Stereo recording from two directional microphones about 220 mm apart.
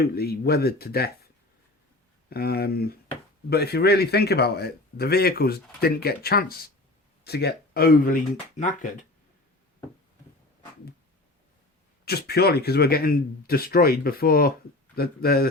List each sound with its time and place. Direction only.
0.0 s speech: 45° left (ahead or behind)
2.3 s speech: 45° left (ahead or behind)
12.0 s speech: 45° left (ahead or behind)